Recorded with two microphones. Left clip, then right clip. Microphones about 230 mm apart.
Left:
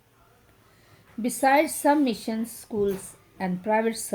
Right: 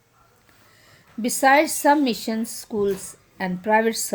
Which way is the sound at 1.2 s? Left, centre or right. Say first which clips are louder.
Right 4 dB; right.